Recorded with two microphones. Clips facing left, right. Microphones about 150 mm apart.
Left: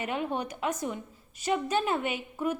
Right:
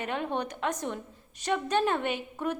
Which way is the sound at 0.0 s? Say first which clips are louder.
Even; 10° left (ahead or behind).